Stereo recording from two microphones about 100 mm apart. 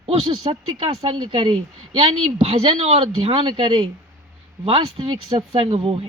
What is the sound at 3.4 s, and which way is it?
A man's voice, 60° right (ahead or behind).